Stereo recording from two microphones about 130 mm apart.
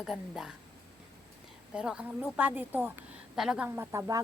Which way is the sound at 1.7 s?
5° right (ahead or behind).